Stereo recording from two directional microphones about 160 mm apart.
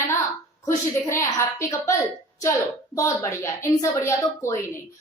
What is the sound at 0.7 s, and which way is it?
Speech, 15° left (ahead or behind).